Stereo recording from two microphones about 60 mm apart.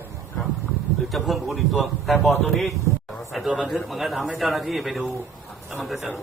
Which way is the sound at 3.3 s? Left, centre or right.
Centre.